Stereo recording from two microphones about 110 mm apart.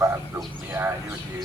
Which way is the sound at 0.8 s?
15° right (ahead or behind).